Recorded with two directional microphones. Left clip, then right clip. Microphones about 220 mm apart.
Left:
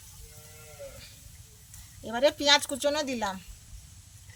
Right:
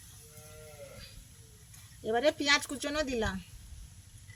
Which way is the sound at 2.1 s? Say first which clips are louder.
Left 4 dB; 50° left (ahead or behind).